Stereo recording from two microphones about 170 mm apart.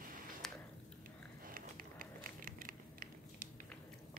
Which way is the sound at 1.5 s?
55° right (ahead or behind).